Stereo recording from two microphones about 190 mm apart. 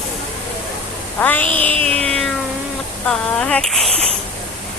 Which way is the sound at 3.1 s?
5° left (ahead or behind).